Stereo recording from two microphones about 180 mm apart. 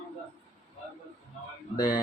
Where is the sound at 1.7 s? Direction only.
20° left (ahead or behind).